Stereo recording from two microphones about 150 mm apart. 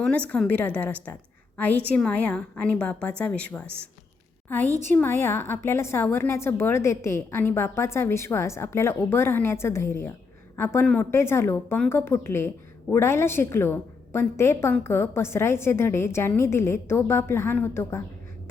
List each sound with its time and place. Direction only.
0.0 s a woman's voice: 10° left (ahead or behind)